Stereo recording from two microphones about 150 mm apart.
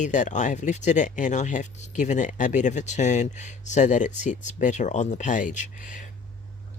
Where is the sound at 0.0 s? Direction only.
55° left (ahead or behind).